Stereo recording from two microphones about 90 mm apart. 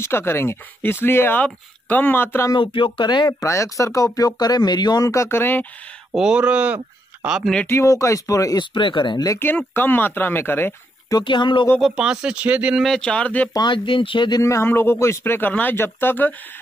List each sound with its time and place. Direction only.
0.0 s speech: 25° left (ahead or behind)
2.5 s speech: 70° left (ahead or behind)
3.3 s speech: 35° left (ahead or behind)
4.4 s speech: 50° left (ahead or behind); by 5.7 s 20° left (ahead or behind)
6.1 s speech: 10° right (ahead or behind)
7.6 s speech: 35° left (ahead or behind)
8.5 s speech: 60° left (ahead or behind)
9.4 s speech: 20° left (ahead or behind)
11.2 s speech: 60° left (ahead or behind)
11.8 s speech: 10° right (ahead or behind)
12.8 s speech: 10° left (ahead or behind)
13.5 s speech: 55° left (ahead or behind)
14.4 s speech: 30° left (ahead or behind)